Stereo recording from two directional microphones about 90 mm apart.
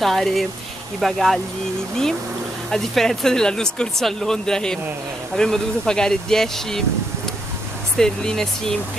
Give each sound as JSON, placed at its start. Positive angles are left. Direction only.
{"t": 0.0, "sound": "speech", "side_deg": 0}
{"t": 2.7, "sound": "speech", "side_deg": 5}
{"t": 8.0, "sound": "speech", "side_deg": 5}